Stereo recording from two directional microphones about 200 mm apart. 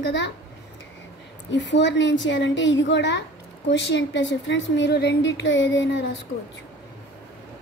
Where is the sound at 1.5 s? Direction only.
65° left (ahead or behind).